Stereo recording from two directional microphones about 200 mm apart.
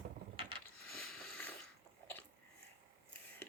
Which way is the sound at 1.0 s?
5° left (ahead or behind).